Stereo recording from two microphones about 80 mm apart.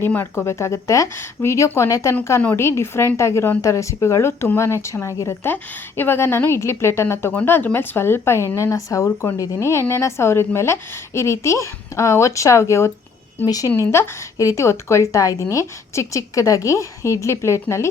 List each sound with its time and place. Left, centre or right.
0.0 s a woman's voice: left
13.9 s a woman's voice: left